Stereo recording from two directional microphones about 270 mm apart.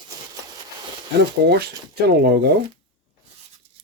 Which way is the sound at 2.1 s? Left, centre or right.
Right.